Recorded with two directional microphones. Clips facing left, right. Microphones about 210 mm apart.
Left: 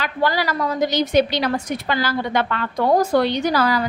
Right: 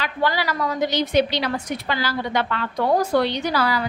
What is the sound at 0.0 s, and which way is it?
A woman's voice, 40° left (ahead or behind).